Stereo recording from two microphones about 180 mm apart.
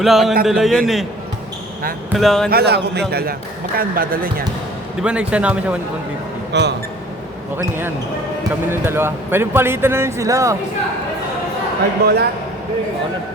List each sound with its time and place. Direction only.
0.0 s a man's voice: centre (ahead or behind)
2.1 s a man's voice: centre (ahead or behind)
2.5 s speech: 65° right (ahead or behind)
5.0 s a man's voice: 5° right (ahead or behind)
6.5 s speech: 70° right (ahead or behind)
7.5 s a man's voice: 10° right (ahead or behind)
12.0 s speech: 60° right (ahead or behind)